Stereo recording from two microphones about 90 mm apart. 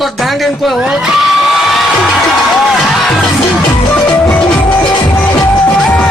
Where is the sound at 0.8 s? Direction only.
5° right (ahead or behind).